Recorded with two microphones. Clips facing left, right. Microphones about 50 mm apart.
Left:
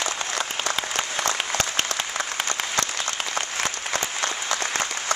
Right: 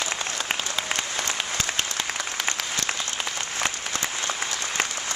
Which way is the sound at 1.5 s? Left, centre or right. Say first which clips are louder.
Left 2 dB; left.